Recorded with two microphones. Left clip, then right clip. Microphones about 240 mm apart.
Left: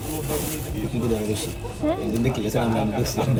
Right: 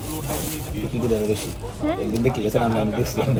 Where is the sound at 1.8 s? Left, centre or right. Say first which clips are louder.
Right 1 dB; centre.